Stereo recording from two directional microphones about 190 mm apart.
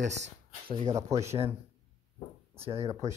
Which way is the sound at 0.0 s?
70° right (ahead or behind).